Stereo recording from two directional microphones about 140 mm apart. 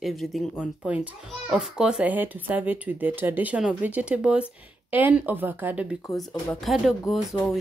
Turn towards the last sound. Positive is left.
turn(degrees=0)  # may be behind; listen again after turning